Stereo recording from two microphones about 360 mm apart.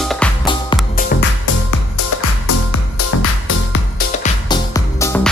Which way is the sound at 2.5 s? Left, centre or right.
Left.